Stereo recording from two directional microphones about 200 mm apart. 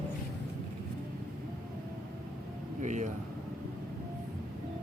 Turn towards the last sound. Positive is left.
turn(degrees=-35)  # may be behind; listen again after turning